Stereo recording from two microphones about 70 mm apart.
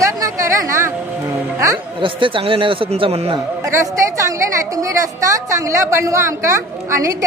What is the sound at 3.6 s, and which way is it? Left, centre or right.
Speech, right.